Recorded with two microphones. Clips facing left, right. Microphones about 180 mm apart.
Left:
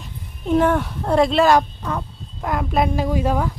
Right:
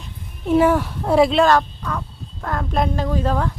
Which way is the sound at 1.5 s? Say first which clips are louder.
Left 1 dB; 20° left (ahead or behind).